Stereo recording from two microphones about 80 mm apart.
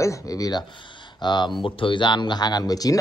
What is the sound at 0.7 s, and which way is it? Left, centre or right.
Speech, left.